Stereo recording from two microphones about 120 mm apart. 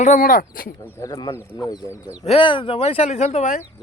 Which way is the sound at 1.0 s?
30° left (ahead or behind).